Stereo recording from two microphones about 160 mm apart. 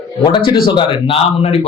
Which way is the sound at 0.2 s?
30° left (ahead or behind).